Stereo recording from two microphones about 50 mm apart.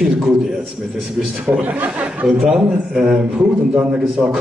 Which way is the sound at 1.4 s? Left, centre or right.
Right.